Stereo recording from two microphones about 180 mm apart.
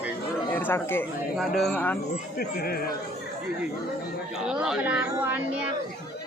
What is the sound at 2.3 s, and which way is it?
Speech, 55° left (ahead or behind).